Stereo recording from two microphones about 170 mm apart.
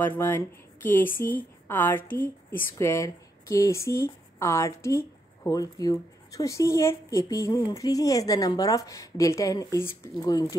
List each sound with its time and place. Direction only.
0.0 s a woman's voice: 15° left (ahead or behind)